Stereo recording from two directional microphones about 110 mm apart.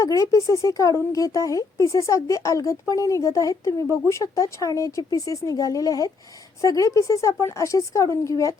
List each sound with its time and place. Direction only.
0.0 s speech: 30° left (ahead or behind)